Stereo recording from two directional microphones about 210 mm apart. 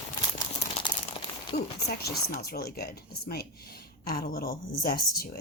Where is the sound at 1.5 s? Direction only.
50° left (ahead or behind).